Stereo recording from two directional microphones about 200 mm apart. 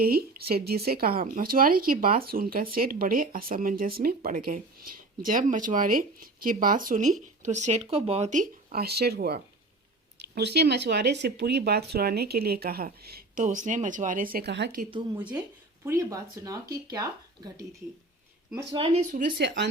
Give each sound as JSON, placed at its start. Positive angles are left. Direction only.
{"t": 0.0, "sound": "speech", "side_deg": -50}
{"t": 15.1, "sound": "speech", "side_deg": -5}
{"t": 19.4, "sound": "speech", "side_deg": -60}